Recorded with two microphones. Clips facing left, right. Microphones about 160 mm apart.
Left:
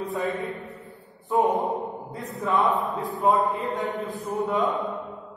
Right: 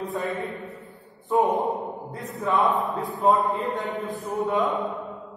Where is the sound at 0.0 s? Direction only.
Centre (ahead or behind).